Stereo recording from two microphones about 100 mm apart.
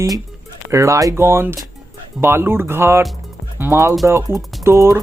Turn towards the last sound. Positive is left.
turn(degrees=-25)  # may be behind; listen again after turning